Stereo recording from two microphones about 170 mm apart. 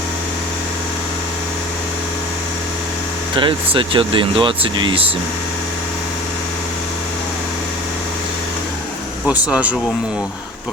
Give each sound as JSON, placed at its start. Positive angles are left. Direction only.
{"t": 3.3, "sound": "speech", "side_deg": -30}
{"t": 9.2, "sound": "speech", "side_deg": -5}